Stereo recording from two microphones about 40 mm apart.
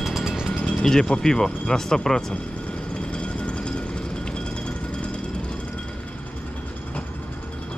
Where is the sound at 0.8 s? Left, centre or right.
Centre.